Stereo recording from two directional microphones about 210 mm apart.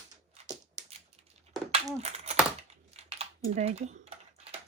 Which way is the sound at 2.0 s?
30° right (ahead or behind).